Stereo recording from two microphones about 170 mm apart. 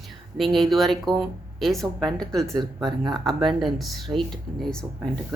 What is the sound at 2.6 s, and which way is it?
Speech, 25° right (ahead or behind).